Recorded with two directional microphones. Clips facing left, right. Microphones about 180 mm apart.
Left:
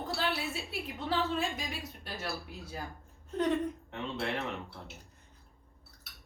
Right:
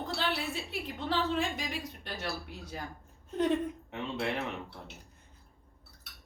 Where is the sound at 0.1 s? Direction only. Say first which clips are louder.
Even; centre (ahead or behind).